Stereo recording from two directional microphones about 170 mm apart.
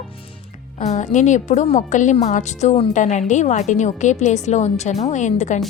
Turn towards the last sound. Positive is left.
turn(degrees=45)  # may be behind; listen again after turning